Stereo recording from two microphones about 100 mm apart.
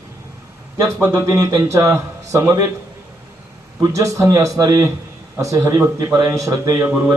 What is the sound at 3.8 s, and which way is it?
A man's voice, 30° right (ahead or behind).